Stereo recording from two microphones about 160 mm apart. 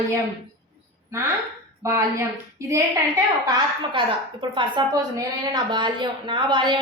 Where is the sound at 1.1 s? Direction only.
15° right (ahead or behind).